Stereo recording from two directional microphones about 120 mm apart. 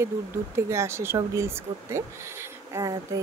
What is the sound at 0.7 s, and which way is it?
Speech, 25° right (ahead or behind).